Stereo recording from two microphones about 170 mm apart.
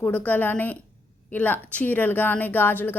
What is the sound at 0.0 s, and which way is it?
Speech, 10° left (ahead or behind).